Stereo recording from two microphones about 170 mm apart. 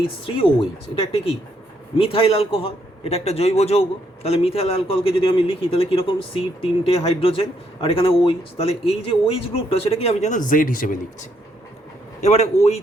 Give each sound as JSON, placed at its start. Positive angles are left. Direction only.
{"t": 0.3, "sound": "a man's voice", "side_deg": 30}
{"t": 2.0, "sound": "a man's voice", "side_deg": 35}
{"t": 12.2, "sound": "a man's voice", "side_deg": 40}